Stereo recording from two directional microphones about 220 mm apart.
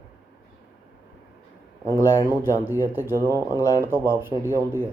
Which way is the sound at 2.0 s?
15° left (ahead or behind).